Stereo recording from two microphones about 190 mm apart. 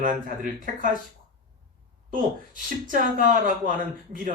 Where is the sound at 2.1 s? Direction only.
45° right (ahead or behind).